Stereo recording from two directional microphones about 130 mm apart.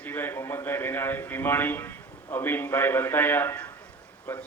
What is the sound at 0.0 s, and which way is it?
A man's voice, 15° left (ahead or behind).